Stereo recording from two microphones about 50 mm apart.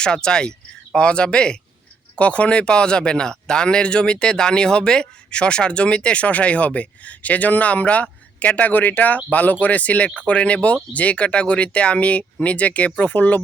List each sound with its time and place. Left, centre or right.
0.0 s speech: centre